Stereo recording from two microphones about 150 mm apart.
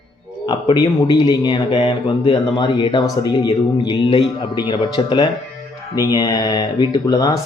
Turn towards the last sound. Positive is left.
turn(degrees=25)  # may be behind; listen again after turning